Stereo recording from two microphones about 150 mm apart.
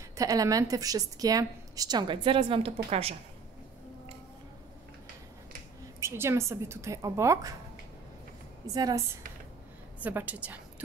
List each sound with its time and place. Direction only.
0.1 s a woman's voice: 25° right (ahead or behind); by 3.2 s 40° right (ahead or behind)
5.9 s a woman's voice: 15° right (ahead or behind)
8.6 s a woman's voice: 25° right (ahead or behind)
10.0 s a woman's voice: 10° right (ahead or behind)